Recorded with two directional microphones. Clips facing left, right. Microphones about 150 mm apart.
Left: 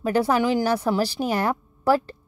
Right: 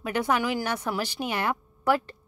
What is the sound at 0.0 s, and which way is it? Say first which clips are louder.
A woman's voice: left 5 dB; 35° left (ahead or behind).